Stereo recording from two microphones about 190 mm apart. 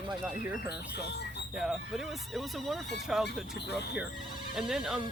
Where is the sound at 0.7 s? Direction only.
60° left (ahead or behind).